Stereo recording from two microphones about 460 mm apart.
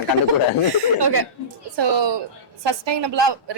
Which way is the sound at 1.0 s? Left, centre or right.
Right.